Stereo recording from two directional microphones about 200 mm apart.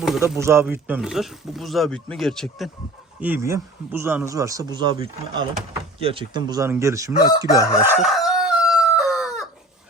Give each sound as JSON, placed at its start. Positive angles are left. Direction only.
{"t": 0.3, "sound": "speech", "side_deg": -10}
{"t": 3.2, "sound": "speech", "side_deg": -10}
{"t": 7.1, "sound": "chicken", "side_deg": 20}
{"t": 7.7, "sound": "crowing", "side_deg": -5}